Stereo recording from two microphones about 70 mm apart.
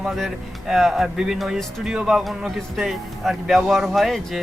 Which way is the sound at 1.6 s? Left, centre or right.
Centre.